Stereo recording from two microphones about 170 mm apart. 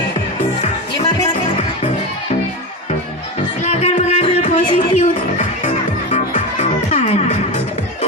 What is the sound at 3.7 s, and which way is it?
Music, 40° left (ahead or behind).